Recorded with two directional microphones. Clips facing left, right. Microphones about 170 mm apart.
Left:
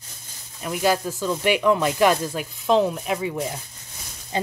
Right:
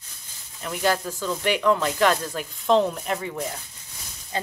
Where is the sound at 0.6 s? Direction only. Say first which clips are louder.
Left 2 dB; 10° left (ahead or behind).